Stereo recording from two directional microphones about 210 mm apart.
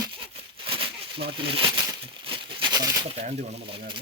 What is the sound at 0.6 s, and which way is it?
Crumpling, 25° right (ahead or behind).